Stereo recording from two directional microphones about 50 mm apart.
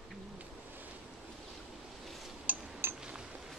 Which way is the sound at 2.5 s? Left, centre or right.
Right.